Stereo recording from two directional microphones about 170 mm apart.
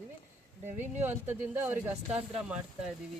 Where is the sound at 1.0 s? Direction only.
15° right (ahead or behind).